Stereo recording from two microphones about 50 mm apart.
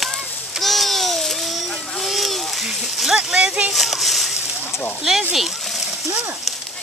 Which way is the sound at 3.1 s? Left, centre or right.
Centre.